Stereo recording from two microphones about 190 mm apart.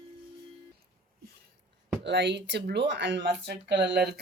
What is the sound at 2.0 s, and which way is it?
Speech, 65° right (ahead or behind).